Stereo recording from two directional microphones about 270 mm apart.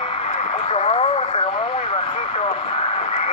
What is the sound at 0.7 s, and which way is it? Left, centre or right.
Radio, left.